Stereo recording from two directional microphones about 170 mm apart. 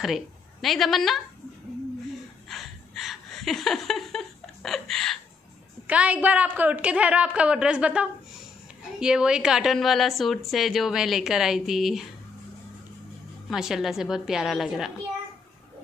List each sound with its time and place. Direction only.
0.0 s a woman's voice: centre (ahead or behind)
2.5 s a sound: centre (ahead or behind)
5.9 s a woman's voice: 10° right (ahead or behind)
13.5 s a woman's voice: centre (ahead or behind)